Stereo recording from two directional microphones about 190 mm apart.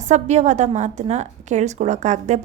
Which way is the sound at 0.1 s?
35° right (ahead or behind).